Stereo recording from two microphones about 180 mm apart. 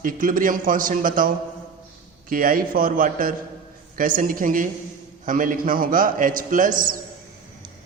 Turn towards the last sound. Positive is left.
turn(degrees=-50)  # may be behind; listen again after turning